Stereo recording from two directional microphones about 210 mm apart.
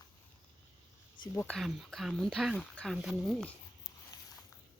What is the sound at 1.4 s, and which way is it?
Speech, centre (ahead or behind).